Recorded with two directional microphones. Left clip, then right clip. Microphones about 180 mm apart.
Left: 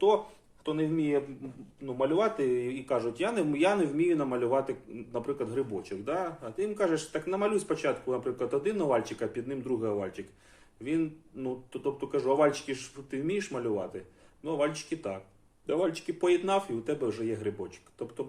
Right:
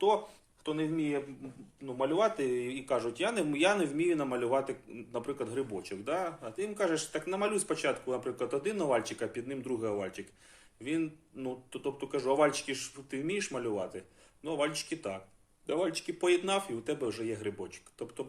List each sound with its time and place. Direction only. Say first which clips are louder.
0.6 s speech: left 3 dB; 20° right (ahead or behind)